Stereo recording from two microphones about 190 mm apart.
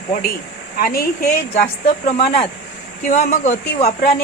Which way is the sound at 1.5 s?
30° left (ahead or behind).